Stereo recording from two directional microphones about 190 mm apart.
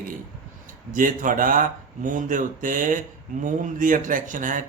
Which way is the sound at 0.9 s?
45° right (ahead or behind).